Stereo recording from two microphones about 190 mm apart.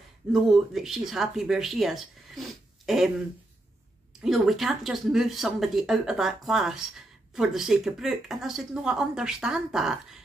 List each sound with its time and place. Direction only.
0.3 s speech: centre (ahead or behind)
4.2 s speech: centre (ahead or behind)